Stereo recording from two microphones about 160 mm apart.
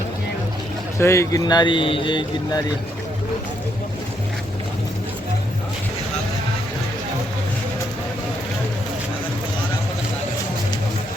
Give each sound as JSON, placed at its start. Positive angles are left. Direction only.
{"t": 0.9, "sound": "speech", "side_deg": 15}